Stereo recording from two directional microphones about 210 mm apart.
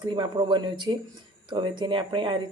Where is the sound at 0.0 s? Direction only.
20° right (ahead or behind).